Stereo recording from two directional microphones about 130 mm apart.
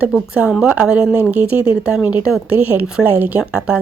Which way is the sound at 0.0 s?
10° right (ahead or behind).